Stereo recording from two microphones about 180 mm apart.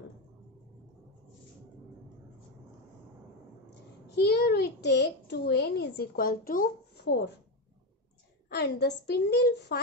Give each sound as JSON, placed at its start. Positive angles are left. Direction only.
{"t": 4.1, "sound": "a child's voice", "side_deg": 60}
{"t": 8.5, "sound": "a woman's voice", "side_deg": 65}